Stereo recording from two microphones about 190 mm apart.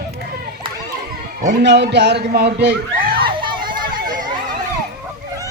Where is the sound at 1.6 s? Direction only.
65° right (ahead or behind).